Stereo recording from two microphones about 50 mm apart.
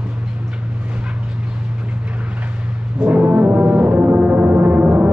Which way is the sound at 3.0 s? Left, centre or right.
Right.